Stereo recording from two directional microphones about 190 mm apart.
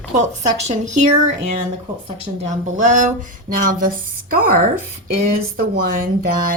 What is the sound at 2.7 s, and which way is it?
A woman's voice, 40° right (ahead or behind).